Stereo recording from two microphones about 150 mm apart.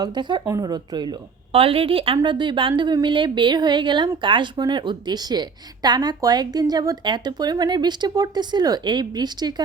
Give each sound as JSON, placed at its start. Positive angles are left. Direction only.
{"t": 0.0, "sound": "a woman's voice", "side_deg": -30}
{"t": 1.5, "sound": "a woman's voice", "side_deg": -40}